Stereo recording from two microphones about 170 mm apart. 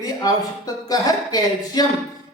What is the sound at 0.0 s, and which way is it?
Speech, 20° left (ahead or behind).